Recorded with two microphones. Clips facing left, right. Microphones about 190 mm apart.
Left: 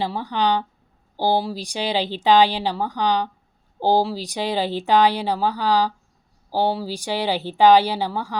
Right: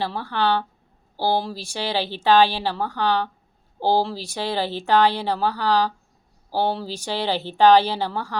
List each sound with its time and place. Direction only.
0.0 s speech: 15° left (ahead or behind)